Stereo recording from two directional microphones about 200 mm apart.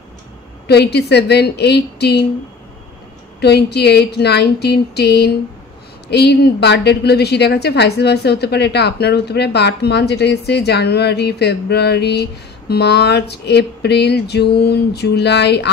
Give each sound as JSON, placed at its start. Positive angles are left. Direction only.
{"t": 0.7, "sound": "a woman's voice", "side_deg": 55}
{"t": 3.3, "sound": "a woman's voice", "side_deg": 55}